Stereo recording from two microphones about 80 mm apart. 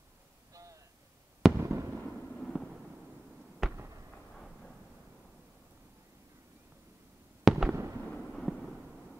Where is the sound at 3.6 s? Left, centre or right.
Centre.